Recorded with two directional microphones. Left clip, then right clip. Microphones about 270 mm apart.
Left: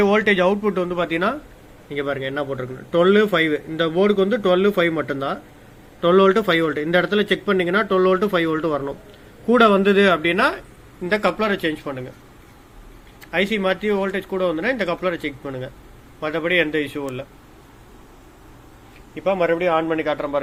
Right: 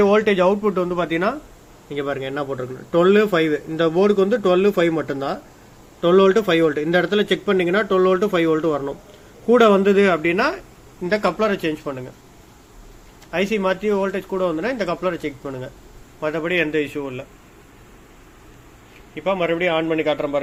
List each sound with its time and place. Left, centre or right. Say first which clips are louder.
0.0 s a man's voice: right 1 dB; centre
13.3 s a man's voice: even; centre
19.1 s a man's voice: left 1 dB; centre